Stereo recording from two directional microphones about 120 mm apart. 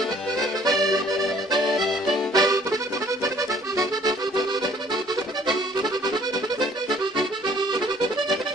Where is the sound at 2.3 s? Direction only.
30° right (ahead or behind).